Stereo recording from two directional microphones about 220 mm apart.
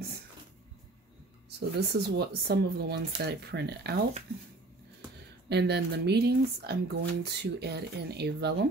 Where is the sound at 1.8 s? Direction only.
50° right (ahead or behind).